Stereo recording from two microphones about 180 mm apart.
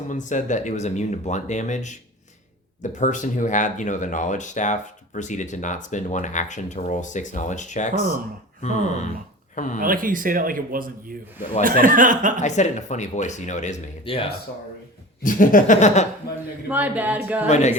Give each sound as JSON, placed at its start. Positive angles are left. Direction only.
{"t": 0.1, "sound": "speech", "side_deg": 45}
{"t": 9.8, "sound": "speech", "side_deg": -50}
{"t": 12.4, "sound": "speech", "side_deg": 40}
{"t": 14.0, "sound": "speech", "side_deg": 30}
{"t": 15.2, "sound": "speech", "side_deg": 50}
{"t": 16.6, "sound": "singing", "side_deg": -10}